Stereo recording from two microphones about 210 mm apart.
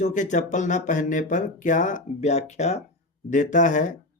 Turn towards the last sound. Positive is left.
turn(degrees=35)  # may be behind; listen again after turning